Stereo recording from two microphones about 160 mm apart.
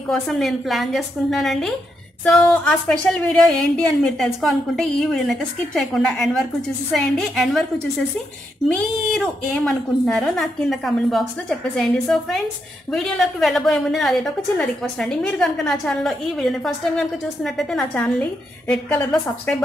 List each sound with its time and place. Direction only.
0.1 s a woman's voice: centre (ahead or behind)
8.7 s a woman's voice: 5° left (ahead or behind)